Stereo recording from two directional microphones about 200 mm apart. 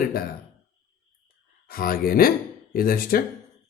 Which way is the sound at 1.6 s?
45° left (ahead or behind).